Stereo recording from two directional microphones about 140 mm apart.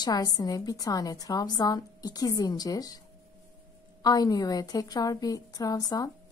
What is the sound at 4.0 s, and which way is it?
A woman's voice, 25° left (ahead or behind).